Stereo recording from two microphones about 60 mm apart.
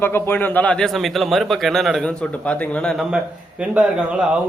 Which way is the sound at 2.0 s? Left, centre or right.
Centre.